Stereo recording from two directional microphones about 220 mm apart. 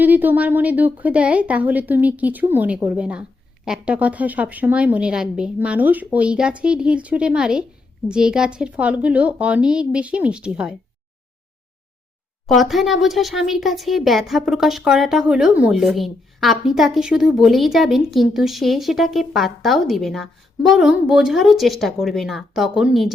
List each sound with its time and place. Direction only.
0.0 s a woman's voice: 10° right (ahead or behind)
12.5 s speech: centre (ahead or behind)